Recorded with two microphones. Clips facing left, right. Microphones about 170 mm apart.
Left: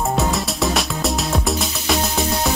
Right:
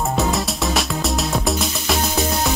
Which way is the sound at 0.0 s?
Centre (ahead or behind).